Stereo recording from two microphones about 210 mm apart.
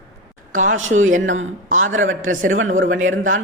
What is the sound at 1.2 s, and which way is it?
Speech, 70° right (ahead or behind).